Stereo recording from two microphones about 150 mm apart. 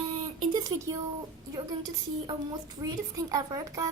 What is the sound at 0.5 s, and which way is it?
A child's voice, 20° right (ahead or behind).